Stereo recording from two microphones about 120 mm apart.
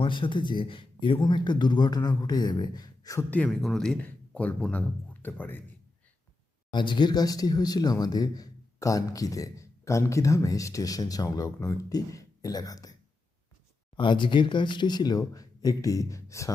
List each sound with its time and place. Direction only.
0.0 s speech: 45° left (ahead or behind)
3.2 s speech: 15° left (ahead or behind)
6.7 s speech: 40° left (ahead or behind)
13.9 s speech: 40° left (ahead or behind); by 16.5 s 25° left (ahead or behind)